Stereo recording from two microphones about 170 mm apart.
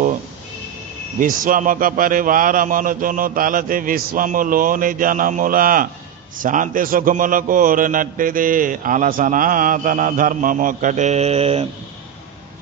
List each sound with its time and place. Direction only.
1.2 s a man's voice: 55° right (ahead or behind)